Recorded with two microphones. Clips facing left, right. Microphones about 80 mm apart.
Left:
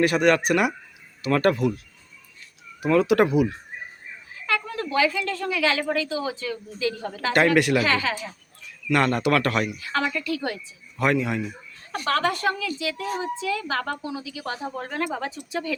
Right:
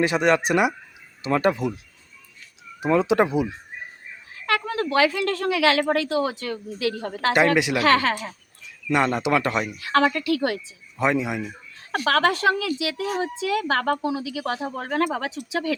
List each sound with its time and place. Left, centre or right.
0.0 s a man's voice: right
2.8 s speech: right
4.4 s a woman's voice: right
7.3 s a man's voice: centre
7.8 s a woman's voice: right
8.9 s a man's voice: centre
9.7 s a woman's voice: right
10.9 s a man's voice: centre
11.9 s a woman's voice: right